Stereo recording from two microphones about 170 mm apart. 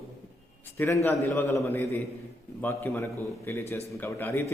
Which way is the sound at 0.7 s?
15° left (ahead or behind).